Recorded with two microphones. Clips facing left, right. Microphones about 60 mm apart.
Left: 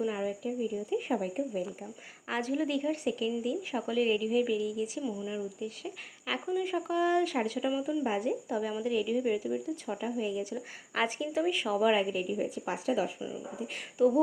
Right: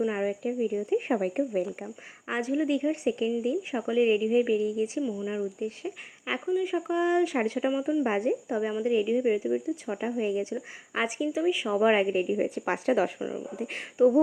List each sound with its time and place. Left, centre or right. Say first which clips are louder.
0.1 s speech: right 4 dB; right
2.2 s speech: right 4 dB; right
6.4 s speech: right 5 dB; centre
7.3 s speech: right 4 dB; right
10.5 s speech: right 3 dB; centre
11.2 s speech: right 4 dB; centre
11.7 s speech: right 4 dB; right
12.5 s speech: right 5 dB; right